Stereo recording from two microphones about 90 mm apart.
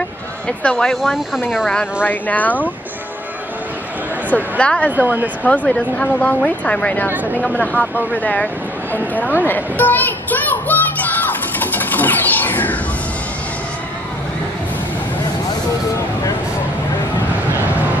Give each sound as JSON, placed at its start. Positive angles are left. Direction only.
{"t": 0.5, "sound": "speech", "side_deg": 10}
{"t": 2.0, "sound": "speech", "side_deg": 20}
{"t": 4.6, "sound": "speech", "side_deg": 15}
{"t": 4.9, "sound": "speech", "side_deg": -15}
{"t": 5.4, "sound": "speech", "side_deg": 15}
{"t": 9.5, "sound": "a sound", "side_deg": 20}